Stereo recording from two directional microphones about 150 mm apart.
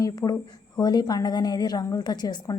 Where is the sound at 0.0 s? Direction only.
25° left (ahead or behind).